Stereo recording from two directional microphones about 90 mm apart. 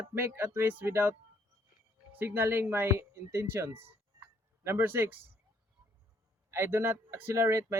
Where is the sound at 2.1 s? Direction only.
25° right (ahead or behind).